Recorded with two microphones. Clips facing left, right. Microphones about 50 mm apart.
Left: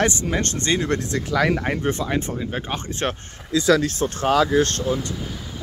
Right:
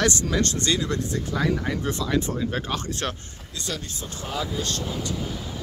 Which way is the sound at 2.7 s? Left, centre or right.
Left.